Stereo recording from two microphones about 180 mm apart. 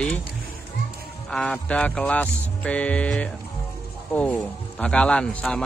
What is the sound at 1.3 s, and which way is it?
Speech, 5° left (ahead or behind).